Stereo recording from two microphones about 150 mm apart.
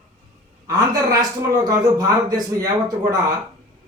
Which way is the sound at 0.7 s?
25° right (ahead or behind).